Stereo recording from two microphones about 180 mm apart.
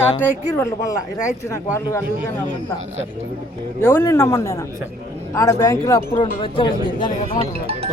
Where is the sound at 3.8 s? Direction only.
15° left (ahead or behind).